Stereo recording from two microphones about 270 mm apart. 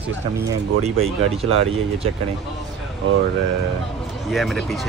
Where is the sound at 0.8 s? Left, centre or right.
Right.